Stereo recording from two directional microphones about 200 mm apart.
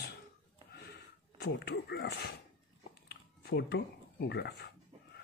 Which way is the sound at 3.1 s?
55° left (ahead or behind).